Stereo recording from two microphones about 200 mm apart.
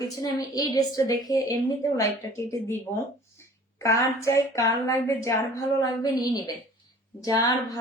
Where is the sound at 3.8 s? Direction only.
15° left (ahead or behind).